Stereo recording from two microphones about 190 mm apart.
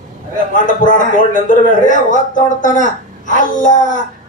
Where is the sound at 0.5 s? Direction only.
45° left (ahead or behind).